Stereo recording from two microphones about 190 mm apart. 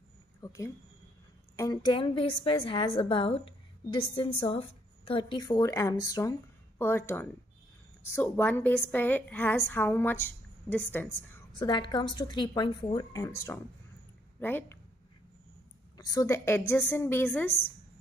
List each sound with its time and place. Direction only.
0.4 s a woman's voice: 15° left (ahead or behind)
11.5 s a woman's voice: 25° left (ahead or behind)
16.0 s a woman's voice: 20° left (ahead or behind)